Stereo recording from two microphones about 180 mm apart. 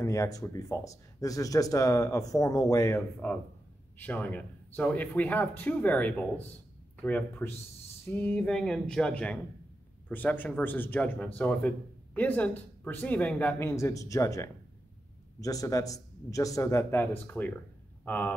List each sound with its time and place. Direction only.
0.0 s speech: 20° left (ahead or behind)